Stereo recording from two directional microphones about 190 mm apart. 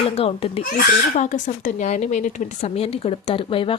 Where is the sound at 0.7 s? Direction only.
45° left (ahead or behind); by 3.7 s 30° left (ahead or behind).